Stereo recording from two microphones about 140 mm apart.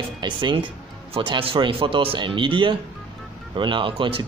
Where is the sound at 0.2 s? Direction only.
35° right (ahead or behind).